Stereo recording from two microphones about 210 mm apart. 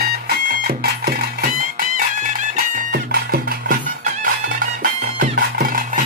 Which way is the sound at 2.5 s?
45° right (ahead or behind).